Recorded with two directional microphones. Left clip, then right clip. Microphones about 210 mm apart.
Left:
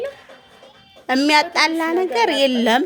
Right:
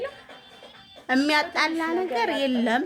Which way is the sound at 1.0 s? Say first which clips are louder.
Left 6 dB; 35° left (ahead or behind).